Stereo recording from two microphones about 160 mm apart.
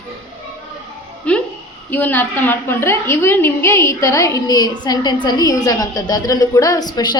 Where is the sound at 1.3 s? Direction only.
10° left (ahead or behind).